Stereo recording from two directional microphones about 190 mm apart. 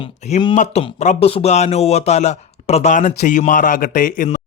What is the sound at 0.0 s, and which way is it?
Speech, 35° left (ahead or behind).